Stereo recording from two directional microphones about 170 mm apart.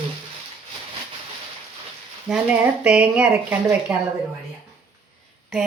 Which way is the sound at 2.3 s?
Centre (ahead or behind).